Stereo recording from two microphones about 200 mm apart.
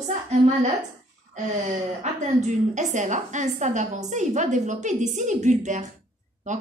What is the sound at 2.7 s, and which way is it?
A woman's voice, 35° right (ahead or behind).